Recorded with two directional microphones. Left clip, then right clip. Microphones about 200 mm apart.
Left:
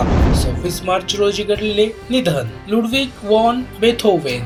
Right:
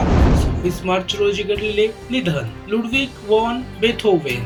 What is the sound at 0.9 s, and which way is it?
Speech, 45° left (ahead or behind).